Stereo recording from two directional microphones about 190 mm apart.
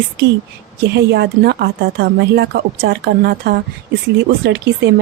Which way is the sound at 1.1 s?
60° right (ahead or behind).